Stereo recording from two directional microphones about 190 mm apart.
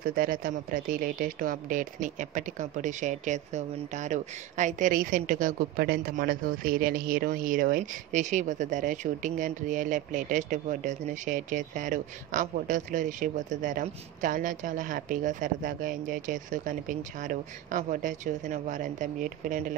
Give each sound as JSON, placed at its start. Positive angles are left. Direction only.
{"t": 0.0, "sound": "speech", "side_deg": -45}